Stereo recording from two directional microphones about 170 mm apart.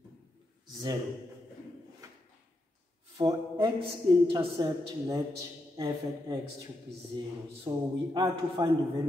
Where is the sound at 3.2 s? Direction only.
30° right (ahead or behind).